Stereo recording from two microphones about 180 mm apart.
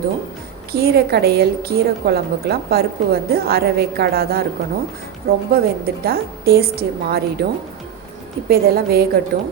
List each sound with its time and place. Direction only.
0.7 s a woman's voice: 60° right (ahead or behind)
8.4 s a woman's voice: 60° right (ahead or behind)